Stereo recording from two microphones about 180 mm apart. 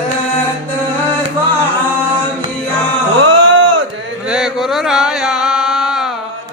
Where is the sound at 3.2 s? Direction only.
90° right.